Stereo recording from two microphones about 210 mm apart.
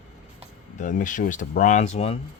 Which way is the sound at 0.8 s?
40° left (ahead or behind).